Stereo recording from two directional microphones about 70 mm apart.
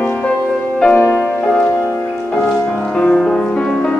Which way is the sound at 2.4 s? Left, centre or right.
Centre.